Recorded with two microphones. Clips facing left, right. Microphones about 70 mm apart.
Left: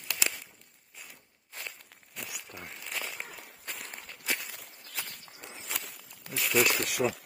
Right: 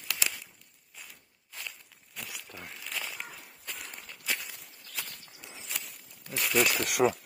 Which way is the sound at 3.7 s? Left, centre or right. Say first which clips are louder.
Even; left.